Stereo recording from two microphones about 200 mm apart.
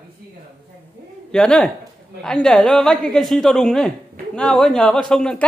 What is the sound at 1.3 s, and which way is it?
A woman's voice, 5° left (ahead or behind).